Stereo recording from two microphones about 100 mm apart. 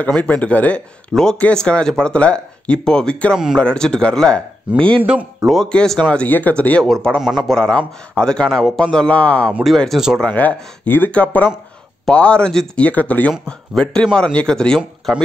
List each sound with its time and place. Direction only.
0.0 s speech: 15° left (ahead or behind)
7.2 s speech: 5° right (ahead or behind)
7.5 s speech: 5° left (ahead or behind)
9.6 s speech: centre (ahead or behind)
10.2 s speech: 15° left (ahead or behind)